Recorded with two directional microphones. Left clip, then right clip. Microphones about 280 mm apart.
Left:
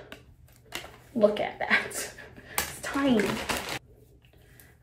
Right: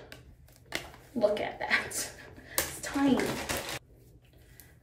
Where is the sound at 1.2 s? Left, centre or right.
Centre.